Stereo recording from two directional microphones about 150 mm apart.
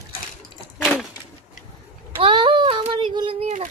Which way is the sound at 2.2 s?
35° right (ahead or behind).